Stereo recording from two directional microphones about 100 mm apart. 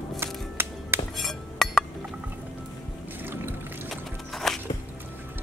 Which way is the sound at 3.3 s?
25° right (ahead or behind).